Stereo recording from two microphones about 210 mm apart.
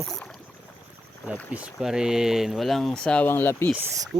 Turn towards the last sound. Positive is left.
turn(degrees=-15)  # may be behind; listen again after turning